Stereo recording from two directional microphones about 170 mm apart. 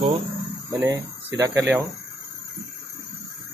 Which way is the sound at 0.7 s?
20° right (ahead or behind).